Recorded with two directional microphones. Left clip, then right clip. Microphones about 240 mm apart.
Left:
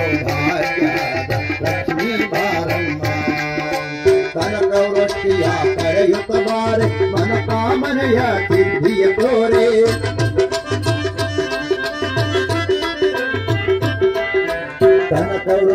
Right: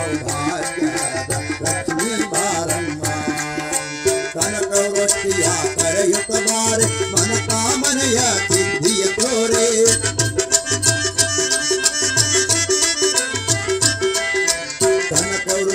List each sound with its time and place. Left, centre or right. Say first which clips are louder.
0.1 s music: left 4 dB; right
2.0 s music: left 2 dB; right
4.0 s music: left 5 dB; right